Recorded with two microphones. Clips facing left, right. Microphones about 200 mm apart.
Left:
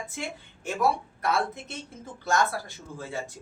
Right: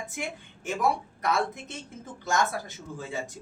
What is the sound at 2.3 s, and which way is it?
Speech, 20° right (ahead or behind).